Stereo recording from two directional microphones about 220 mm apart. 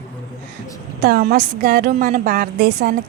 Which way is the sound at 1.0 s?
45° right (ahead or behind).